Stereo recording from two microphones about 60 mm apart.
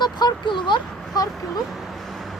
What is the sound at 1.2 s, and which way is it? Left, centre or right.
Speech, left.